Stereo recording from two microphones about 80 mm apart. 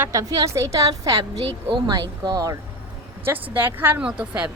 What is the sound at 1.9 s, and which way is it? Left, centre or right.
Speech, right.